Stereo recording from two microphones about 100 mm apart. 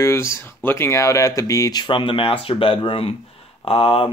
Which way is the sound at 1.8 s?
60° left (ahead or behind).